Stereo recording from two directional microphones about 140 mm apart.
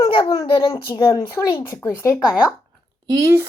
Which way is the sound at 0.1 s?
35° left (ahead or behind).